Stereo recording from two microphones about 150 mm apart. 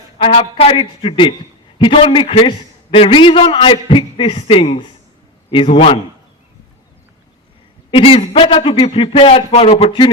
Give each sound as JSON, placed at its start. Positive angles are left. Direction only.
{"t": 0.2, "sound": "a man's voice", "side_deg": 35}
{"t": 7.9, "sound": "a man's voice", "side_deg": 35}